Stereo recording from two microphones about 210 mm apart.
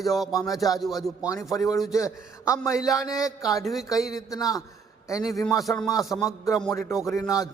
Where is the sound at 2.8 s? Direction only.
15° left (ahead or behind).